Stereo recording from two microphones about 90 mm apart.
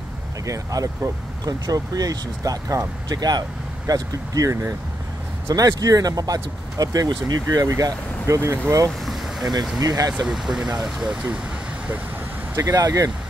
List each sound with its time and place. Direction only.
0.5 s speech: 40° right (ahead or behind)
9.0 s boat: centre (ahead or behind)
9.8 s speech: 45° right (ahead or behind)
10.2 s speech: 5° right (ahead or behind)
12.5 s speech: 40° right (ahead or behind)